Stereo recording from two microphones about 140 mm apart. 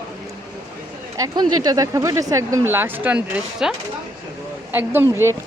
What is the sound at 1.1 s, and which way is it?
Speech, 25° right (ahead or behind).